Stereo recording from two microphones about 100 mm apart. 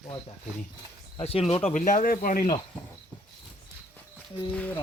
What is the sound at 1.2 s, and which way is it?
Speech, 75° left (ahead or behind).